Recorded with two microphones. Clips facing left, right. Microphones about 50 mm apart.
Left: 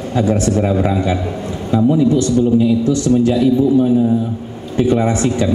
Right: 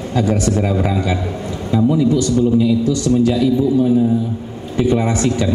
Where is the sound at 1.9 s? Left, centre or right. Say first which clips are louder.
Left 2 dB; left.